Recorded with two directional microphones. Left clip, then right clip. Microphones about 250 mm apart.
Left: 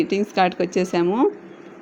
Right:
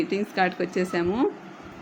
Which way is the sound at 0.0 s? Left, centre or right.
Centre.